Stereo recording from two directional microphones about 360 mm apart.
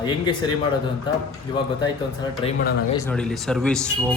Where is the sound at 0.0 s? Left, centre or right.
Centre.